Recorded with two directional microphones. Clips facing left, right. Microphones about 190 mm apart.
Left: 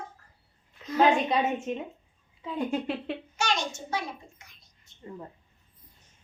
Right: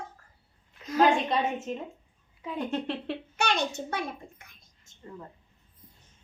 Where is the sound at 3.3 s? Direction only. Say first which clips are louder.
Right 2 dB; 60° right (ahead or behind).